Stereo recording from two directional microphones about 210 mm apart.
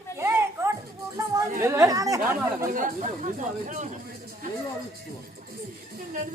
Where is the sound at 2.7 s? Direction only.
40° right (ahead or behind).